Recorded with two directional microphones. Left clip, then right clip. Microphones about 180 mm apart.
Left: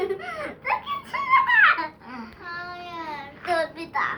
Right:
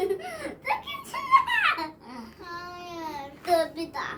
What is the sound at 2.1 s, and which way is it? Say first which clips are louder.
Child singing: left 4 dB; centre (ahead or behind).